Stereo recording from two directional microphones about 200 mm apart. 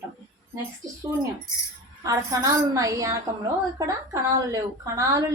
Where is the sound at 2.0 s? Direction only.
15° right (ahead or behind).